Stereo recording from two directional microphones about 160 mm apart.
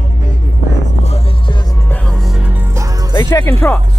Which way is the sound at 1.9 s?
Centre (ahead or behind).